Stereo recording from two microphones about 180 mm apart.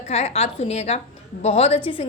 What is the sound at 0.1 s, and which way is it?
A woman's voice, 35° left (ahead or behind).